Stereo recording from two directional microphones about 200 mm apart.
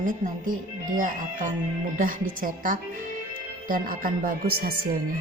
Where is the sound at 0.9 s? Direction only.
40° right (ahead or behind).